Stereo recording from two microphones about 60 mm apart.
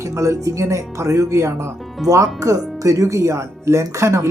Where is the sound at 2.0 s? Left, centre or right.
Right.